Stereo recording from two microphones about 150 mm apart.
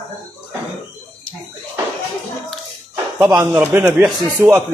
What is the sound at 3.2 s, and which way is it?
A man's voice, 5° right (ahead or behind).